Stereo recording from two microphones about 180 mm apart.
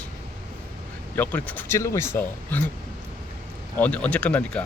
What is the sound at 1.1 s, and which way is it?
Speech, 10° left (ahead or behind).